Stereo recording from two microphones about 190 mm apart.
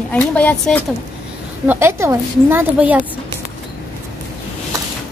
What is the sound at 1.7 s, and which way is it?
A woman's voice, 15° right (ahead or behind).